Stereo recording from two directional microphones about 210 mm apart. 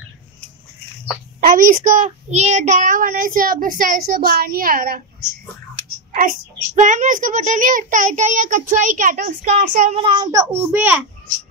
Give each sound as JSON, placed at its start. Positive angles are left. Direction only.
{"t": 1.4, "sound": "a child's voice", "side_deg": -40}
{"t": 6.8, "sound": "a child's voice", "side_deg": -35}